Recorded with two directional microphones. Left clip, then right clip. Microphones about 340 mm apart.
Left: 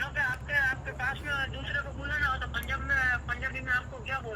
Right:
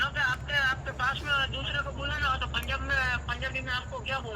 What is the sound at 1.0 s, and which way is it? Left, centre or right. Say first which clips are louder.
Speech: right 4 dB; centre.